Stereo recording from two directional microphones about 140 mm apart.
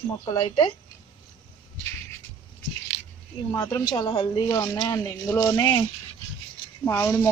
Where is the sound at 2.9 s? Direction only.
45° left (ahead or behind).